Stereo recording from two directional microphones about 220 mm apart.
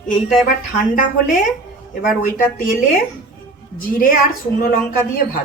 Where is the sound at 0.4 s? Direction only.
40° left (ahead or behind).